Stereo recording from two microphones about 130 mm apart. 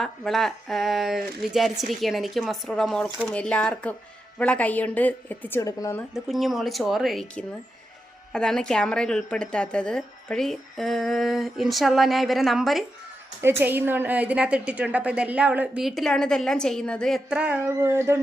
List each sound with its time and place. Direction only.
0.0 s a woman's voice: centre (ahead or behind); by 6.0 s 25° left (ahead or behind)
6.1 s speech: centre (ahead or behind)
13.4 s a woman's voice: 15° right (ahead or behind)
17.7 s speech: 20° right (ahead or behind)